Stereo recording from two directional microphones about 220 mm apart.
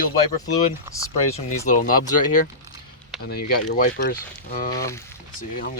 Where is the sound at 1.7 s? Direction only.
35° left (ahead or behind).